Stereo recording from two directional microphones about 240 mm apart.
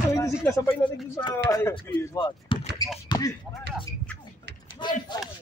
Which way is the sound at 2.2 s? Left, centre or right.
Left.